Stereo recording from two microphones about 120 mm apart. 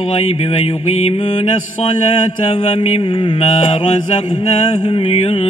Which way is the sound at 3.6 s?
60° left (ahead or behind).